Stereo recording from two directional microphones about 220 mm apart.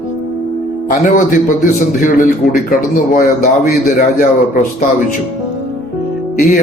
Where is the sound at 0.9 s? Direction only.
35° left (ahead or behind).